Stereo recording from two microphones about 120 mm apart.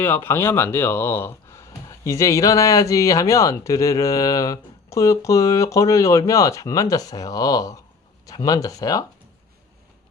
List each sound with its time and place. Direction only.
0.0 s speech: 20° left (ahead or behind)